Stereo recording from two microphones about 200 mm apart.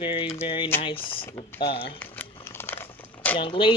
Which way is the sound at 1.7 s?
25° left (ahead or behind).